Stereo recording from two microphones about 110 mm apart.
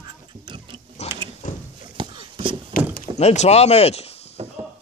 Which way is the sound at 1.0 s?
85° left.